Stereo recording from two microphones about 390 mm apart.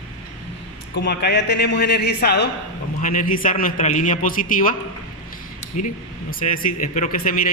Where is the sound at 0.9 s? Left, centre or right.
Left.